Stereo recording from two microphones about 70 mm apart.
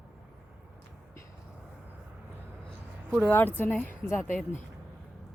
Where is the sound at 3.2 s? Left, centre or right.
Left.